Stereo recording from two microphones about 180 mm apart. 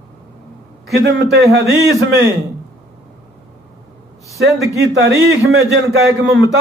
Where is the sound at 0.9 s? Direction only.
70° right (ahead or behind).